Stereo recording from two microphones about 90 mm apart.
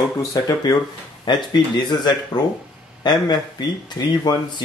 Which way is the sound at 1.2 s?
55° left (ahead or behind).